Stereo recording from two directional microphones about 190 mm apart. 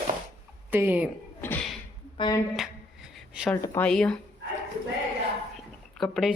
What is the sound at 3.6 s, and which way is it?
Speech, 15° left (ahead or behind).